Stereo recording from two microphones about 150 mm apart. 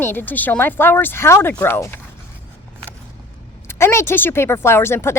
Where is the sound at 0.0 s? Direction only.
15° left (ahead or behind).